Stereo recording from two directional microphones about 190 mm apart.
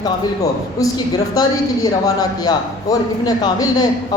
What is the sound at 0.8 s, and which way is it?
A man's voice, 20° left (ahead or behind).